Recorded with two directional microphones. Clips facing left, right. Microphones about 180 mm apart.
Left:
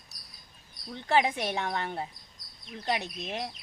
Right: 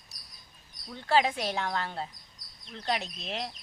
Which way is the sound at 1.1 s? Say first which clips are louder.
Even; 20° left (ahead or behind).